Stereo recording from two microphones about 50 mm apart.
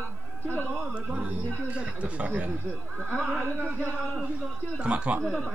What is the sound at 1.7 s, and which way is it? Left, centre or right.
Speech, right.